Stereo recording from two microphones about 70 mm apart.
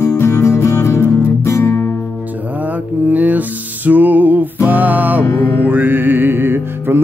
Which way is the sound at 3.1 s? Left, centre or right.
Right.